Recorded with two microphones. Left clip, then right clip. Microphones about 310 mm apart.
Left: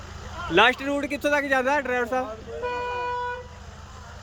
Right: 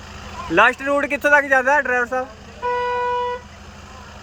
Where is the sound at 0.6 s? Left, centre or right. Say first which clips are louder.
Right 4 dB; centre.